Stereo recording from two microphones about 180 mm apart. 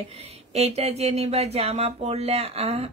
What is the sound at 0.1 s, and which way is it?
Speech, 35° right (ahead or behind).